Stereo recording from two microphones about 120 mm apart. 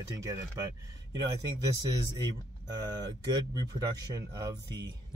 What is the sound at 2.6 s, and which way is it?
Speech, 35° right (ahead or behind).